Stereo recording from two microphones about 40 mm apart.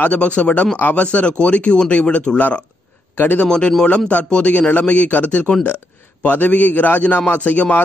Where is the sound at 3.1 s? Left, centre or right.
Left.